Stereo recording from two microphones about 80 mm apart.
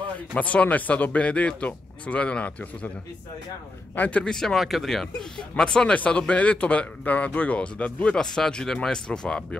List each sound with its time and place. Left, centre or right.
0.3 s speech: centre
3.9 s a man's voice: left
4.2 s speech: centre